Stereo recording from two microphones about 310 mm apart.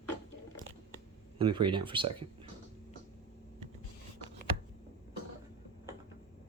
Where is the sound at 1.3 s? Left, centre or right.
Centre.